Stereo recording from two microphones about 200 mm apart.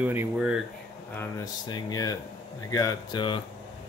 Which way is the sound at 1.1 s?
15° left (ahead or behind).